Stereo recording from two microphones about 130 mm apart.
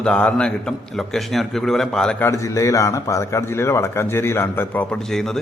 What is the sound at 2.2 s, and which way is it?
A man's voice, 25° left (ahead or behind).